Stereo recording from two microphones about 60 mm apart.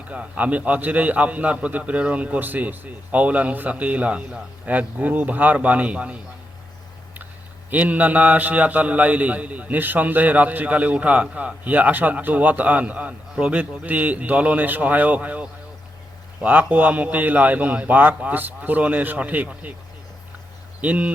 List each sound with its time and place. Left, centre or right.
0.1 s a man's voice: right
7.7 s a man's voice: right
20.8 s a man's voice: right